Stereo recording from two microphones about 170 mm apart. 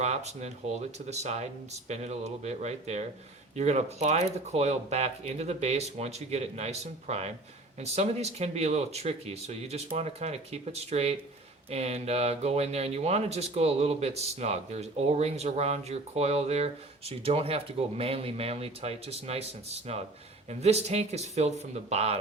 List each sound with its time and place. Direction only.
0.0 s speech: 40° right (ahead or behind)
20.5 s speech: 40° right (ahead or behind)